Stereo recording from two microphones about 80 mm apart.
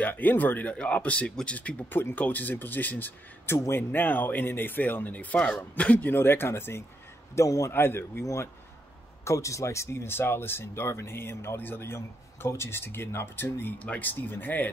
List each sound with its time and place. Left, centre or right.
0.0 s speech: left
7.3 s a man's voice: left
7.7 s speech: left
9.2 s speech: left